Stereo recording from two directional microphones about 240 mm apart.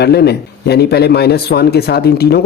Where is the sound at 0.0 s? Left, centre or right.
Left.